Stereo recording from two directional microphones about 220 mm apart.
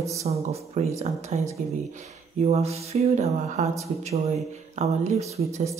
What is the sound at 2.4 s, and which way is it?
Speech, 30° right (ahead or behind).